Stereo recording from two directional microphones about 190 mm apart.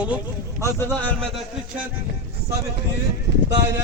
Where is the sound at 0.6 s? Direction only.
10° left (ahead or behind).